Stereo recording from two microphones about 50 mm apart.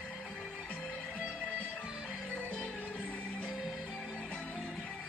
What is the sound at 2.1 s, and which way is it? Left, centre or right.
Music, left.